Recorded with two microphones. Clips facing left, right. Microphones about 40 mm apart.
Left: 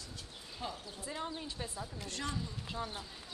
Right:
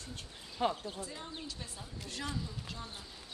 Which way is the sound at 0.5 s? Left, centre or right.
Right.